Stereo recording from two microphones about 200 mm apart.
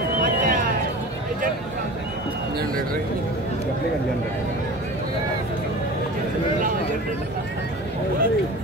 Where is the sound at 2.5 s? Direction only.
45° right (ahead or behind).